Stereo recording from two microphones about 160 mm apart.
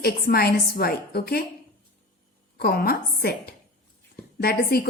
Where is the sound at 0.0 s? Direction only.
70° left (ahead or behind).